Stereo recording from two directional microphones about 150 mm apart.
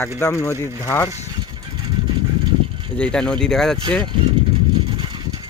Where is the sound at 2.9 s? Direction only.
5° left (ahead or behind).